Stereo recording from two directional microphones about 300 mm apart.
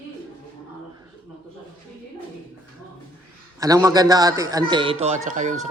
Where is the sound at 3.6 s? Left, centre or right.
Centre.